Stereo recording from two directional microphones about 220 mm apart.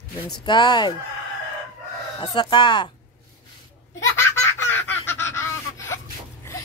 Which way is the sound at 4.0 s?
10° left (ahead or behind).